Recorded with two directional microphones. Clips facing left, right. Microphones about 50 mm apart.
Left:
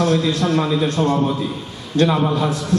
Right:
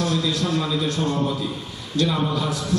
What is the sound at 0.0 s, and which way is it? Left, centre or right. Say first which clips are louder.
A man's voice: left 5 dB; left.